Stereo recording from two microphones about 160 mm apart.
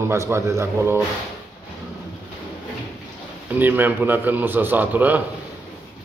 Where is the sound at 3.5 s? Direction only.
10° right (ahead or behind).